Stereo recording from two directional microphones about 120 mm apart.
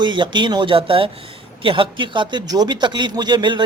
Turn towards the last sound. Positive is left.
turn(degrees=-40)  # may be behind; listen again after turning